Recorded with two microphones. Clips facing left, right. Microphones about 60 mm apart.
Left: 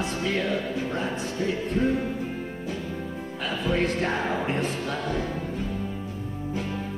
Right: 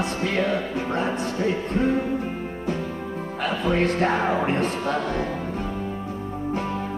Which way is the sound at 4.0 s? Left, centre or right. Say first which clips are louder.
Right 5 dB; right.